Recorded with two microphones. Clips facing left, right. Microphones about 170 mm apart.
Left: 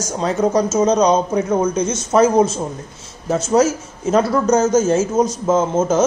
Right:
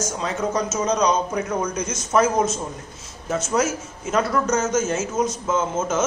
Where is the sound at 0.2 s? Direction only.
35° left (ahead or behind).